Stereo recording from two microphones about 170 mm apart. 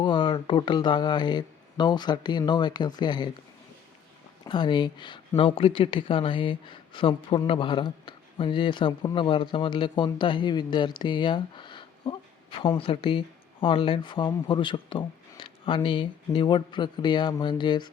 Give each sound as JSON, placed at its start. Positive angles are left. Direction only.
{"t": 0.0, "sound": "speech", "side_deg": 30}
{"t": 4.4, "sound": "speech", "side_deg": 25}